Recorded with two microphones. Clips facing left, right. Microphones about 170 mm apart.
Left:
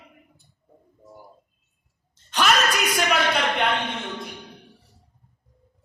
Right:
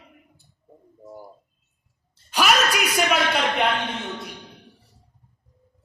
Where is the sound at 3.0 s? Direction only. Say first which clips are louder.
Right 2 dB; centre (ahead or behind).